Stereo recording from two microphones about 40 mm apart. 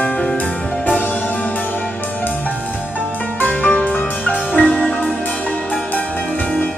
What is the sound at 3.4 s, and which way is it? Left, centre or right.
Music, left.